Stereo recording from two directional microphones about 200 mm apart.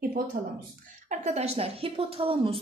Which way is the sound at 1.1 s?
35° right (ahead or behind).